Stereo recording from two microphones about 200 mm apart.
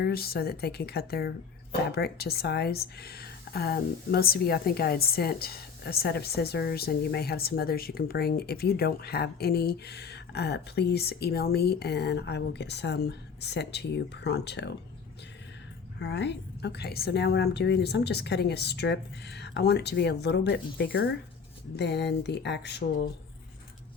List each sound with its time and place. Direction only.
0.0 s speech: 50° left (ahead or behind)
16.0 s a woman's voice: 60° left (ahead or behind)